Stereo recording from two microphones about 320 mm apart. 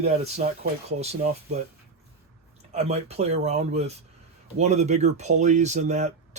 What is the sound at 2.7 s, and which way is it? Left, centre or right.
Speech, centre.